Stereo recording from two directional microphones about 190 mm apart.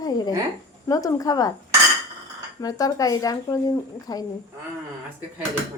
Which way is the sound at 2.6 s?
20° left (ahead or behind).